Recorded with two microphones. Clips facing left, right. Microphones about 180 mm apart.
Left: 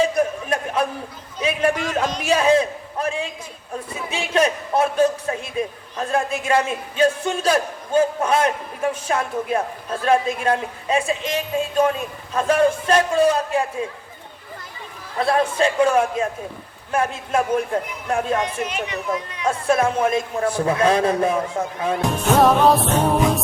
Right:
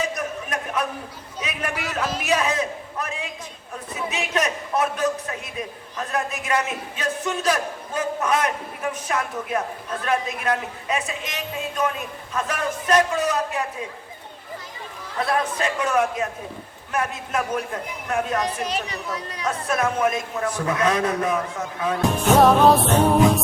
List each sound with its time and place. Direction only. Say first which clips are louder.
0.0 s a sound: left 8 dB; 30° left (ahead or behind)
1.4 s a man's voice: left 9 dB; 30° left (ahead or behind)
15.2 s a man's voice: left 5 dB; 30° left (ahead or behind)
18.6 s speech: left 2 dB; 35° right (ahead or behind)
19.5 s a man's voice: left 5 dB; 30° left (ahead or behind)
22.4 s music: even; centre (ahead or behind)